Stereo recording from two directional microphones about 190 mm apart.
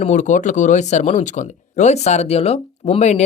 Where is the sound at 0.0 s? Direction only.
40° left (ahead or behind).